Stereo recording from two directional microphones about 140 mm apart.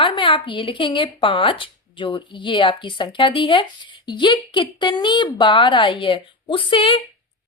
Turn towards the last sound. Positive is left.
turn(degrees=40)  # may be behind; listen again after turning